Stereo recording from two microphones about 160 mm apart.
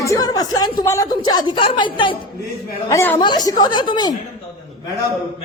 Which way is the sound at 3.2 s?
25° left (ahead or behind).